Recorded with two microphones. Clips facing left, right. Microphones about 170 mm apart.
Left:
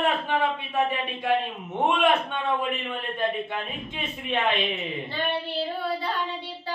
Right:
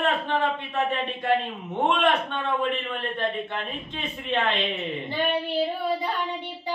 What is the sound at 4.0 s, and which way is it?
Speech, 10° left (ahead or behind).